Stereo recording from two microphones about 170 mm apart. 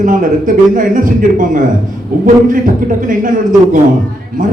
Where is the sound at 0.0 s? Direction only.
50° right (ahead or behind).